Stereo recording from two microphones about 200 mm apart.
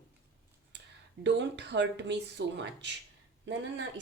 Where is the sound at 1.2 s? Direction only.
60° right (ahead or behind).